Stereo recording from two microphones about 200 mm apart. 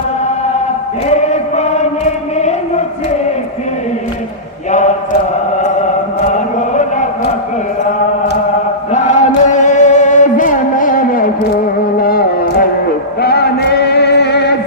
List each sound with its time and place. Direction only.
1.0 s chant: 35° left (ahead or behind)
2.4 s a sound: 35° left (ahead or behind)
6.2 s chant: 40° left (ahead or behind)
8.9 s chant: 35° left (ahead or behind)
11.9 s a sound: 45° left (ahead or behind)
13.2 s chant: 55° left (ahead or behind)